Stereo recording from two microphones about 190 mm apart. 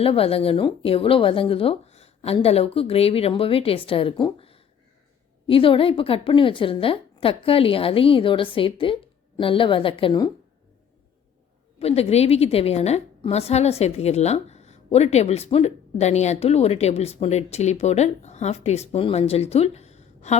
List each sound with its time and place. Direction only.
0.0 s speech: 30° left (ahead or behind)
11.8 s a woman's voice: 30° left (ahead or behind)